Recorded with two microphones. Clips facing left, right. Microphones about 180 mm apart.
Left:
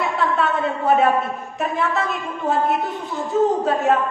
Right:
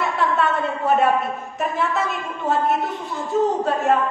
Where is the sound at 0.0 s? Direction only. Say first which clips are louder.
Even; centre (ahead or behind).